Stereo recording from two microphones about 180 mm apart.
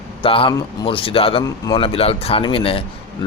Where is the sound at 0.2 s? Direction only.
30° left (ahead or behind).